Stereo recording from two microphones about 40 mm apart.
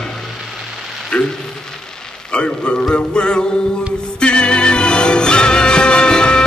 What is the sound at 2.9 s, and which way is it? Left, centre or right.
Music, left.